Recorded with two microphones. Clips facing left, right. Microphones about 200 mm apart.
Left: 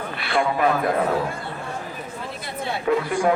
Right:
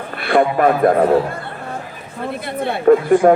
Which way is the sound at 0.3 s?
55° right (ahead or behind).